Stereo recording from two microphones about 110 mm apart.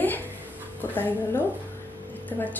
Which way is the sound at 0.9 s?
20° left (ahead or behind).